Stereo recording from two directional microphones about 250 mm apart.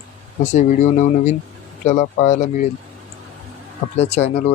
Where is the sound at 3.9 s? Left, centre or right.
Left.